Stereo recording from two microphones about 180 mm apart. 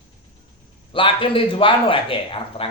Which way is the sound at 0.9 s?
30° left (ahead or behind).